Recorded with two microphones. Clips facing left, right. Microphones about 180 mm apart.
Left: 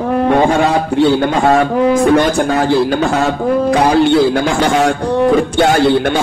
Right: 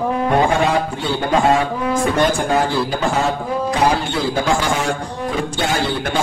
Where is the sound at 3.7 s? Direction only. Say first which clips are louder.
Left 8 dB; 70° left (ahead or behind).